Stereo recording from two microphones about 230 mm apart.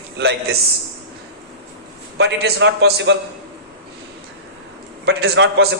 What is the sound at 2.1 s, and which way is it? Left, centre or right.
A man's voice, right.